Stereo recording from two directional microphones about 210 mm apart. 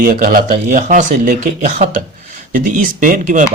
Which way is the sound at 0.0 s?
40° right (ahead or behind).